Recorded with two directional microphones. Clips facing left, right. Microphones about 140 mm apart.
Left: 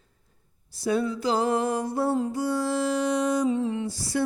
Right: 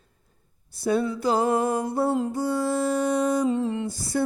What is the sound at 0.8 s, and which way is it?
Music, 55° right (ahead or behind).